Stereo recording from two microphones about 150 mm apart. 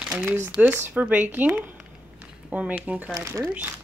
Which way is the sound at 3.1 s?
25° right (ahead or behind).